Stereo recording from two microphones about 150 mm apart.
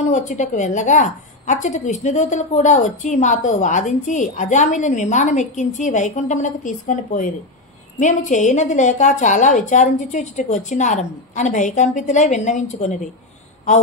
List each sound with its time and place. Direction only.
0.1 s a woman's voice: 55° left (ahead or behind)